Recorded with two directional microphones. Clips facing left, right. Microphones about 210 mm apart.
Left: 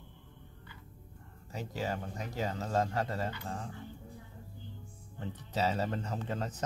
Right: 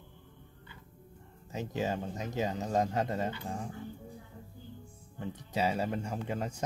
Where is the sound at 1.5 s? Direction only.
20° right (ahead or behind).